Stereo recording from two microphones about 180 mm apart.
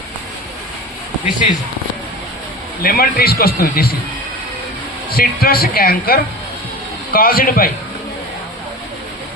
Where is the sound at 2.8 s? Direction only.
55° left (ahead or behind).